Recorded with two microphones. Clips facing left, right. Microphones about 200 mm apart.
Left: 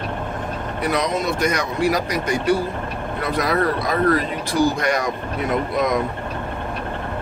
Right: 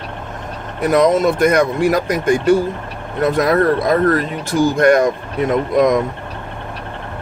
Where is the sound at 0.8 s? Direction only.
50° right (ahead or behind).